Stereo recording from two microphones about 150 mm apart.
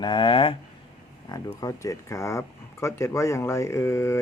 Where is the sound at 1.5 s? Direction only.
20° left (ahead or behind).